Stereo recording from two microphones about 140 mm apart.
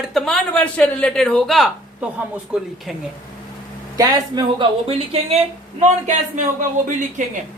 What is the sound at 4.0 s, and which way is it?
Speech, 25° right (ahead or behind).